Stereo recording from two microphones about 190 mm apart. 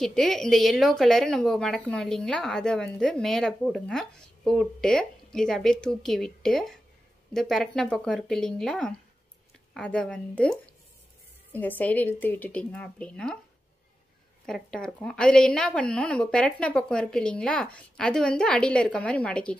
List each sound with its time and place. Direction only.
0.0 s a woman's voice: centre (ahead or behind)
11.5 s speech: 10° left (ahead or behind)
14.4 s a woman's voice: 5° left (ahead or behind)